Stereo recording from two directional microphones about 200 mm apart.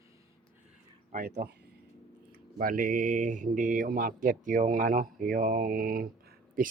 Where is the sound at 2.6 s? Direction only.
45° right (ahead or behind).